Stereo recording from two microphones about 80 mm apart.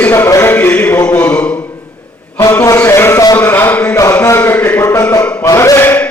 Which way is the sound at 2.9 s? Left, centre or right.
Left.